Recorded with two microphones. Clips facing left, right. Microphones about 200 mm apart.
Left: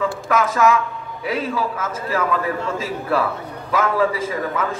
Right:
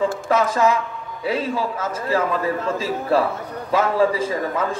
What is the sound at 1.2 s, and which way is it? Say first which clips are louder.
A man's voice: even; 30° right (ahead or behind).